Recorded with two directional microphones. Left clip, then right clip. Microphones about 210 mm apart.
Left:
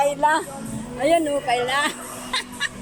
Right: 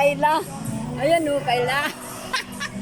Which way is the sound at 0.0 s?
Centre (ahead or behind).